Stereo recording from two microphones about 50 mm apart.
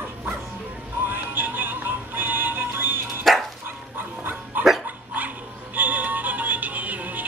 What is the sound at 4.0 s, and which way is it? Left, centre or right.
Dog, right.